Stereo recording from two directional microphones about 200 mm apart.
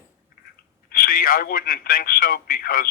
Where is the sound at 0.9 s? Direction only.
50° left (ahead or behind).